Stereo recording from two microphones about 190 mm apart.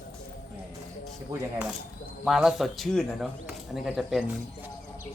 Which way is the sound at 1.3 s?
15° right (ahead or behind).